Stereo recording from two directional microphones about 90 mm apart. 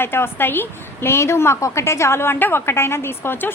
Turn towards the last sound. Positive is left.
turn(degrees=25)  # may be behind; listen again after turning